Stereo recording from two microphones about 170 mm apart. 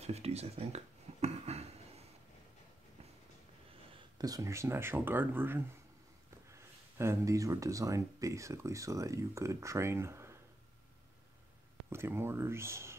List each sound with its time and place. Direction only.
0.0 s a sound: 40° right (ahead or behind)
3.9 s speech: 20° right (ahead or behind)
11.9 s speech: 15° right (ahead or behind)